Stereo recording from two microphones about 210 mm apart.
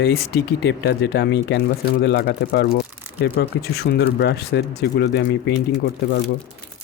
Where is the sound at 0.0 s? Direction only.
50° left (ahead or behind).